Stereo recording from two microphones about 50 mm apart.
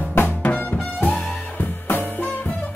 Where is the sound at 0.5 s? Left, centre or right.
Left.